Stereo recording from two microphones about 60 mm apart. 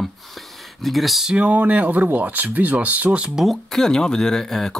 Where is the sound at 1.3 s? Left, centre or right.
Right.